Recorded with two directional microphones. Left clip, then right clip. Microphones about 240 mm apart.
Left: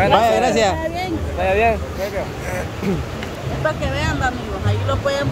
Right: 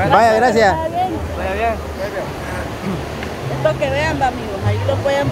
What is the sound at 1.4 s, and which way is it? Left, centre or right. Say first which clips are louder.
Speech: left 4 dB; left.